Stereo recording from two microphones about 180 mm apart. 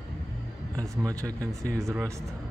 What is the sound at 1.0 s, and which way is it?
Speech, 20° right (ahead or behind).